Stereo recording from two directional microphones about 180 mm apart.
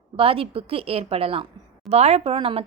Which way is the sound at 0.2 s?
30° right (ahead or behind).